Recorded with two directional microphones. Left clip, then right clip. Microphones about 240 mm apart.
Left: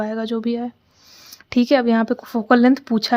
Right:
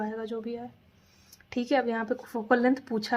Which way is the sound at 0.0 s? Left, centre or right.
Left.